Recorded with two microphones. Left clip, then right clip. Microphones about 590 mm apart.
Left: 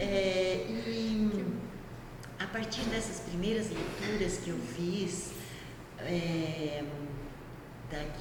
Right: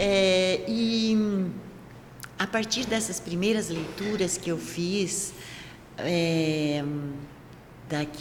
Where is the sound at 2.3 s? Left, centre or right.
Right.